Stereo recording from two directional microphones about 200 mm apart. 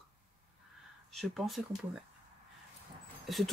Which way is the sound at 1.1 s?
Centre (ahead or behind).